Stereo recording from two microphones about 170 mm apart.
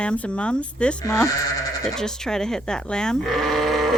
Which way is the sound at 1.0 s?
20° left (ahead or behind).